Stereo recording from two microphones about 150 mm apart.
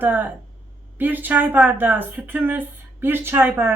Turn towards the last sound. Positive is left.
turn(degrees=-15)  # may be behind; listen again after turning